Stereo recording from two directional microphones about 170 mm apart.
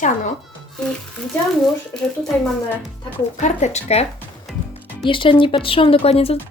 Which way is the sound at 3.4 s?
40° left (ahead or behind).